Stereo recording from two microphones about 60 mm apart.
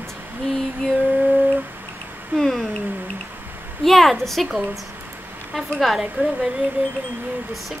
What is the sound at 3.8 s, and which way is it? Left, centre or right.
Speech, centre.